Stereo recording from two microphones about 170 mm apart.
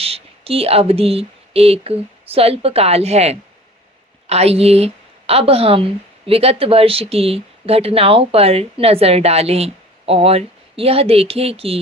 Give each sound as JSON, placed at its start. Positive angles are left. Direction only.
{"t": 0.0, "sound": "a woman's voice", "side_deg": -35}